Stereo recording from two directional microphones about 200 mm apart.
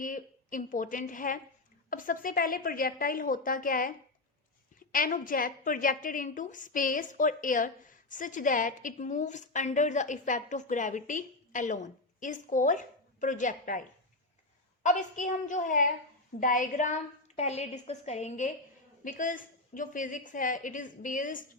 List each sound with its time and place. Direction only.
0.0 s a woman's voice: 40° left (ahead or behind)
14.8 s a woman's voice: 40° left (ahead or behind)